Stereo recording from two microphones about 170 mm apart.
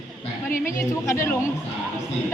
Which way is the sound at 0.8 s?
20° left (ahead or behind).